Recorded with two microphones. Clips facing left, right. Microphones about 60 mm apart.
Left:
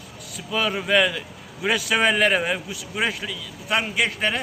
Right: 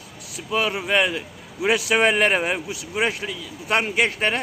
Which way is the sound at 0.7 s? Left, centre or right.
Centre.